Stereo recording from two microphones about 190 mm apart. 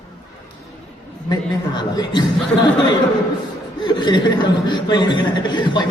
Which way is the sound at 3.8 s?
25° left (ahead or behind).